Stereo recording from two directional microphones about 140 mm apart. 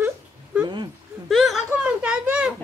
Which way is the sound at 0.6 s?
30° right (ahead or behind).